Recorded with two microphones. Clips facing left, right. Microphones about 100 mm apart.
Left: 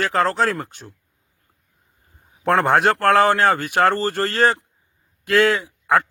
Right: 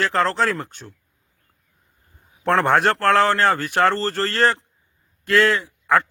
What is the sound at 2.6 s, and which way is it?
Speech, centre (ahead or behind).